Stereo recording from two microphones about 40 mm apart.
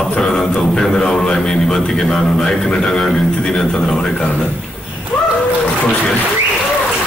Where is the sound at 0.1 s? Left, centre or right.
Centre.